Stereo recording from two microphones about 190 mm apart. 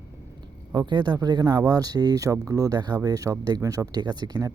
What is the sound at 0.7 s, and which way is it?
Speech, 20° right (ahead or behind).